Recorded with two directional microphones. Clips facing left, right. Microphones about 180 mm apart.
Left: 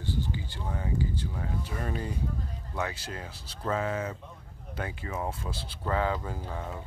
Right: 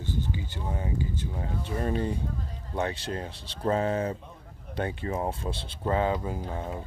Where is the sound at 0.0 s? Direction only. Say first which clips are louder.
Right 1 dB; 20° right (ahead or behind).